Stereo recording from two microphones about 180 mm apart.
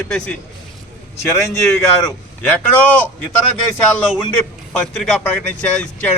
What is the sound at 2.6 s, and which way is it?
Speech, 10° left (ahead or behind).